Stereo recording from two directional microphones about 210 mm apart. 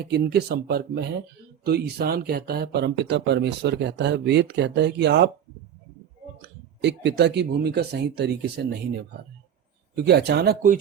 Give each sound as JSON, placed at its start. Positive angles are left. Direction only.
{"t": 0.0, "sound": "speech", "side_deg": -50}
{"t": 6.8, "sound": "speech", "side_deg": -55}